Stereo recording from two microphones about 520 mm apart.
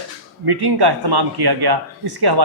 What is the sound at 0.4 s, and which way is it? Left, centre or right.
Speech, right.